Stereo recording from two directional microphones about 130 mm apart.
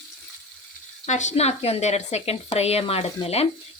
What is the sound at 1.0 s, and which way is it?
A woman's voice, 65° left (ahead or behind).